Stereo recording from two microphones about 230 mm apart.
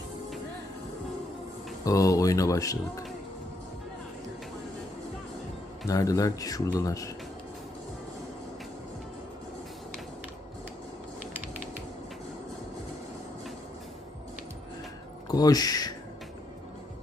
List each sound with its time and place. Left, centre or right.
1.8 s speech: centre
5.9 s speech: centre
15.3 s speech: centre